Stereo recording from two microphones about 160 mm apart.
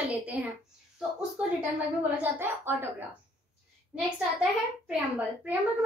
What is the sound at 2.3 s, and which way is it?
Speech, 15° right (ahead or behind).